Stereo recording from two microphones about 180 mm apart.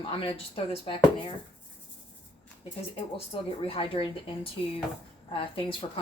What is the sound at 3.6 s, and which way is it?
Speech, 30° left (ahead or behind).